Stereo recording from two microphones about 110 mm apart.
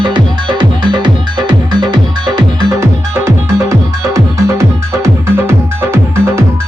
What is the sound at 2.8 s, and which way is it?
Music, 25° right (ahead or behind).